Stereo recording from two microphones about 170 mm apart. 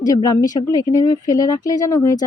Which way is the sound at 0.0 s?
20° left (ahead or behind).